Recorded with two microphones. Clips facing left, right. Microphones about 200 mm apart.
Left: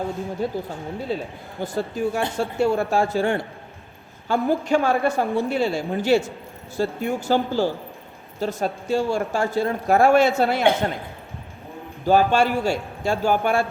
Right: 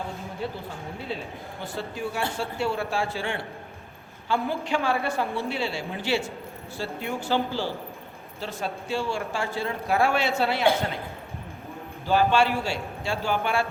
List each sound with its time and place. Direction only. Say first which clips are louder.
0.4 s a woman's voice: left 5 dB; 45° left (ahead or behind)
12.0 s a woman's voice: left 4 dB; 45° left (ahead or behind)